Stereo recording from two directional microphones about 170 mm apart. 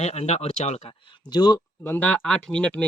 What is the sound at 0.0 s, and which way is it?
Speech, 40° left (ahead or behind).